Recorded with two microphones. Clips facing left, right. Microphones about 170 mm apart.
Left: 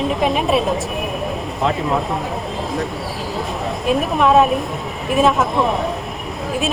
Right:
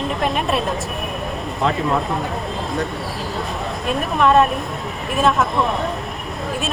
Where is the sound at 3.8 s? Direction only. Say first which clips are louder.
Left 2 dB; centre (ahead or behind).